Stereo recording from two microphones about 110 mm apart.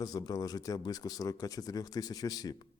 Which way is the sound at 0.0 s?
35° left (ahead or behind).